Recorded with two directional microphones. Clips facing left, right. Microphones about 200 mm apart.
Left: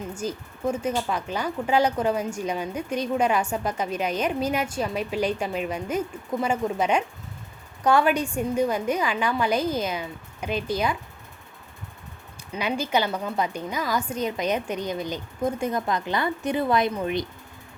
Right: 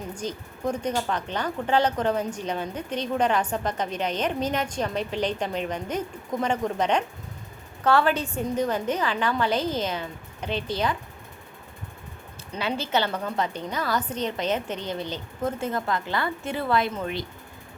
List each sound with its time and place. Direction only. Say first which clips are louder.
0.1 s speech: left 2 dB; 10° left (ahead or behind)
12.5 s speech: left 1 dB; 15° left (ahead or behind)